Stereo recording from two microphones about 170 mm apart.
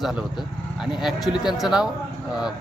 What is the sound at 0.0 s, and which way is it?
A man's voice, centre (ahead or behind).